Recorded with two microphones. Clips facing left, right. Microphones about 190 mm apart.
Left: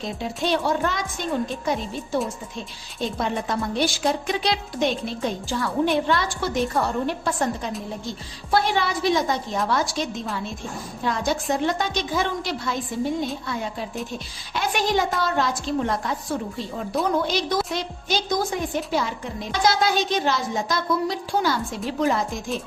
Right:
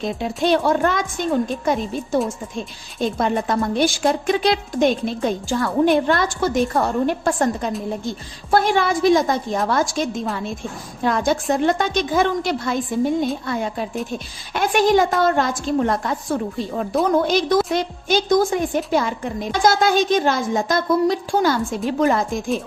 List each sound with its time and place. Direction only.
0.4 s a woman's voice: 55° right (ahead or behind)
3.2 s a woman's voice: 50° right (ahead or behind)